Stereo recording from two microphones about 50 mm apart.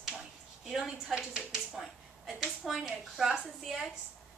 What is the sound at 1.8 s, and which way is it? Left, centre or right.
Speech, centre.